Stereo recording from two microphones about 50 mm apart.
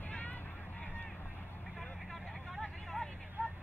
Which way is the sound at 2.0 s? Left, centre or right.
Centre.